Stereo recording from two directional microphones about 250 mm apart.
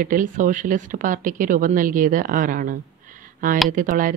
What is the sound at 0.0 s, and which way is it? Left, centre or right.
A woman's voice, right.